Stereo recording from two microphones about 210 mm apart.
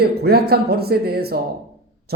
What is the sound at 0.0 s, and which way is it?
Speech, 50° right (ahead or behind).